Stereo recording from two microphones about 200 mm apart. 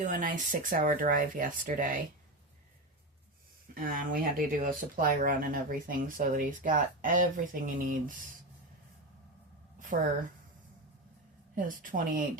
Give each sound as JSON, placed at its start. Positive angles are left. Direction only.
{"t": 0.0, "sound": "speech", "side_deg": -40}
{"t": 3.8, "sound": "speech", "side_deg": -45}
{"t": 9.9, "sound": "speech", "side_deg": -35}
{"t": 11.5, "sound": "speech", "side_deg": -45}